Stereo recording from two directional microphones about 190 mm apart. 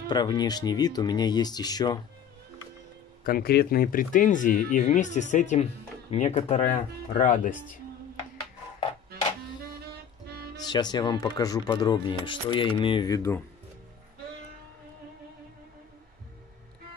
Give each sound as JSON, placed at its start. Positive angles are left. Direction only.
{"t": 0.1, "sound": "speech", "side_deg": 20}
{"t": 3.3, "sound": "speech", "side_deg": 55}
{"t": 10.7, "sound": "speech", "side_deg": 20}